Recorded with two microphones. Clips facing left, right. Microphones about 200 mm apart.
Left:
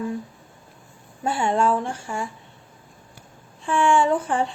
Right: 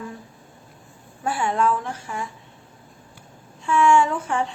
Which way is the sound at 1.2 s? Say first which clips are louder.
Left 1 dB; 25° left (ahead or behind).